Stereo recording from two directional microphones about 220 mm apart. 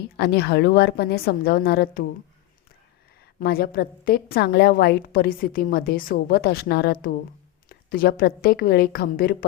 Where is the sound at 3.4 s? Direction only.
45° left (ahead or behind).